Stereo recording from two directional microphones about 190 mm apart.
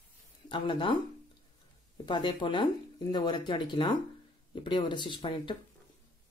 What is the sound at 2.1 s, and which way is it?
Speech, 25° left (ahead or behind).